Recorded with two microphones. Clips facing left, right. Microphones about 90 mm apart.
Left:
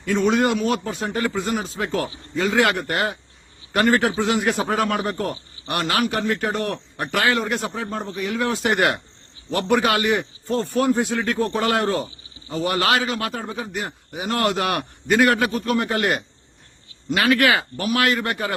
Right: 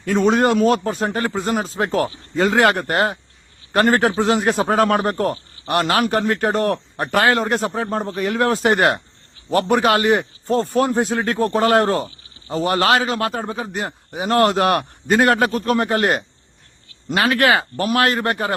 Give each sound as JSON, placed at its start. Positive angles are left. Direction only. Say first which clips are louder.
{"t": 0.0, "sound": "speech", "louder": "right 3 dB", "side_deg": -40}